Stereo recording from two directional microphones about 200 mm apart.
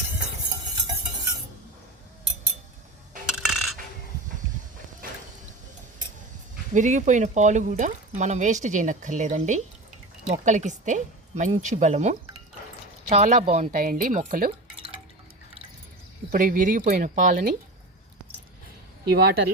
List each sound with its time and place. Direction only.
3.4 s coin: centre (ahead or behind)
6.7 s speech: 40° right (ahead or behind)
16.3 s speech: 45° right (ahead or behind)
19.1 s speech: 55° right (ahead or behind)